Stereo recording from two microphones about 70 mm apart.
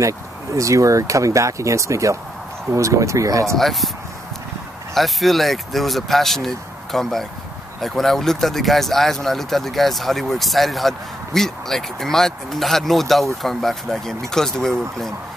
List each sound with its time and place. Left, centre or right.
0.0 s speech: right
3.5 s speech: centre
4.9 s speech: centre